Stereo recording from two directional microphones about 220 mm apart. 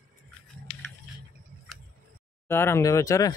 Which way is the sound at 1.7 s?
Centre (ahead or behind).